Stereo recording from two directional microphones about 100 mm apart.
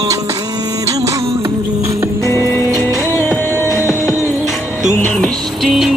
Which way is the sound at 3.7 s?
25° right (ahead or behind).